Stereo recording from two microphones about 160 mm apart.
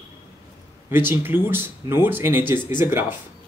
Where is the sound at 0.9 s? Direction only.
15° right (ahead or behind).